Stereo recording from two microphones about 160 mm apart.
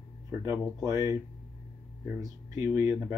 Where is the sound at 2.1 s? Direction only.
15° right (ahead or behind).